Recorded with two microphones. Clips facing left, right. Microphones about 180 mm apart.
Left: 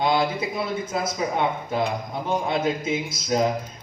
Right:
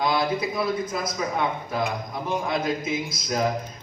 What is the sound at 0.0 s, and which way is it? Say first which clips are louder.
Speech: left 1 dB; 25° left (ahead or behind).